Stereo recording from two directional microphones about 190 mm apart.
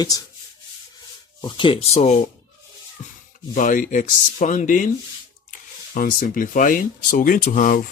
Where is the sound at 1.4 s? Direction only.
25° left (ahead or behind).